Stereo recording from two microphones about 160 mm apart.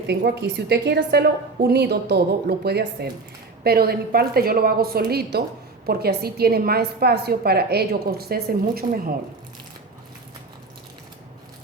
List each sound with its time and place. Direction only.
0.1 s a woman's voice: 90° right
3.6 s a woman's voice: 75° right (ahead or behind)